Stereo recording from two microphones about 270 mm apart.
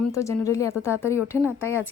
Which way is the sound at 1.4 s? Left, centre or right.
Centre.